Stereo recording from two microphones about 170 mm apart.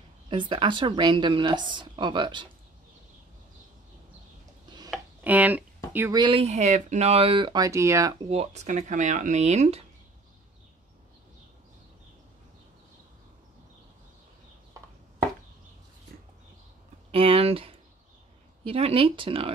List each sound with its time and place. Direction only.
0.3 s speech: 30° right (ahead or behind)
4.9 s a sound: 10° right (ahead or behind)
6.1 s speech: 25° right (ahead or behind)
6.4 s speech: 40° right (ahead or behind); by 8.2 s 20° right (ahead or behind)
8.3 s speech: 40° right (ahead or behind)
17.1 s a sound: 35° right (ahead or behind)
18.6 s speech: 35° right (ahead or behind)